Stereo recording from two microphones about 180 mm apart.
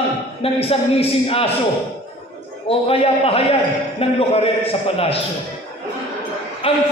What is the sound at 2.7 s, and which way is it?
Speech, 30° left (ahead or behind).